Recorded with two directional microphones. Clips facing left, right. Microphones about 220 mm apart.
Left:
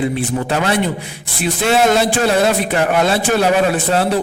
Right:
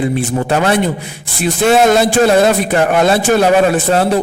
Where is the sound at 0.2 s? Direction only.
50° right (ahead or behind).